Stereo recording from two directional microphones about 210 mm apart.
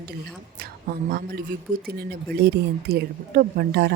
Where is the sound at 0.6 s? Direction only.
45° right (ahead or behind).